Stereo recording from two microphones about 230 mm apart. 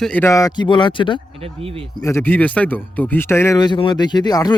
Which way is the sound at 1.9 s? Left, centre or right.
Centre.